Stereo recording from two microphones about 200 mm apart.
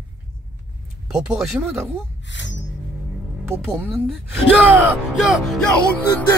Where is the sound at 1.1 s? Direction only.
5° right (ahead or behind).